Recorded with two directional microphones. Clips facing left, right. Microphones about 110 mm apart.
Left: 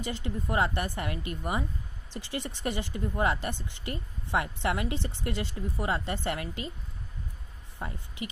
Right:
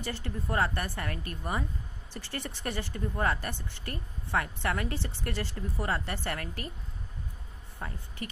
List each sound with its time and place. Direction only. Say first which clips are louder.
0.0 s speech: left 2 dB; 15° left (ahead or behind)
7.8 s speech: left 2 dB; 15° left (ahead or behind)